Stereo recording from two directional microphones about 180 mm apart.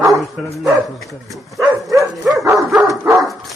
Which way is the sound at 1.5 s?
15° right (ahead or behind).